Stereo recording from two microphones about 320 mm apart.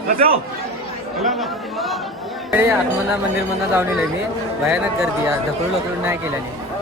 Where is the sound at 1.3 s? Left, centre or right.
Centre.